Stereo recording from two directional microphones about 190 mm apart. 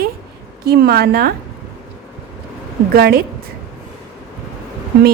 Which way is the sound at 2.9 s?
55° right (ahead or behind).